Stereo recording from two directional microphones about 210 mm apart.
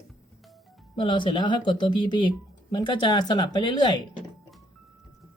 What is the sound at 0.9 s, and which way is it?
Speech, 20° left (ahead or behind).